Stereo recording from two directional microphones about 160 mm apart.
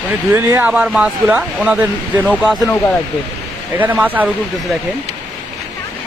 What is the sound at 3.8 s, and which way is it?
Speech, 10° right (ahead or behind).